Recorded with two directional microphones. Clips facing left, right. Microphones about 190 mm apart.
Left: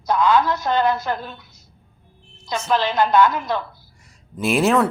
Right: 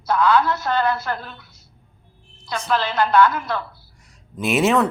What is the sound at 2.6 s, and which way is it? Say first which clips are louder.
Speech: left 2 dB; 15° left (ahead or behind).